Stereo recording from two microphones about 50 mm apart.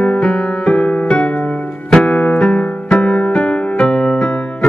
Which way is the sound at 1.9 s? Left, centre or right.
Centre.